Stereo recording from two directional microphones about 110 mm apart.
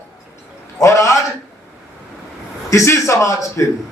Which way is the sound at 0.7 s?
30° left (ahead or behind).